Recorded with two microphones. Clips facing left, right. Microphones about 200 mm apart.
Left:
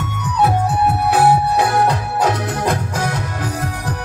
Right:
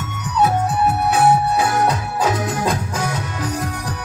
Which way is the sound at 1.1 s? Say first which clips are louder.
Left 2 dB; 60° left (ahead or behind).